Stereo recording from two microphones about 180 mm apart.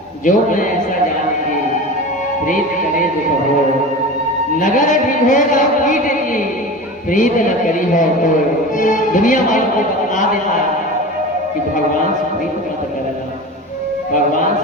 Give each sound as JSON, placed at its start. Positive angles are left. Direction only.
{"t": 0.3, "sound": "a man's voice", "side_deg": 45}
{"t": 4.6, "sound": "a man's voice", "side_deg": 45}